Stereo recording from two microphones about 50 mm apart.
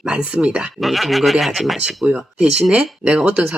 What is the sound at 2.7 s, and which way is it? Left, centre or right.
Speech, right.